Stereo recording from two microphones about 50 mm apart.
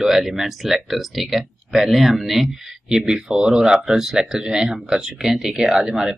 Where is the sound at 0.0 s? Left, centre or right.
Centre.